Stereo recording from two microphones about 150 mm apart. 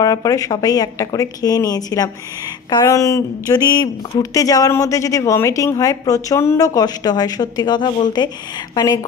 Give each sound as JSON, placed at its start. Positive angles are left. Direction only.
{"t": 0.0, "sound": "speech", "side_deg": 25}